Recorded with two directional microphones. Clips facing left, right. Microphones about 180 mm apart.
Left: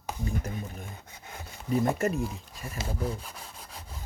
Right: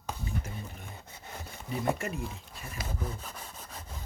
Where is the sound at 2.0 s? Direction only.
45° left (ahead or behind).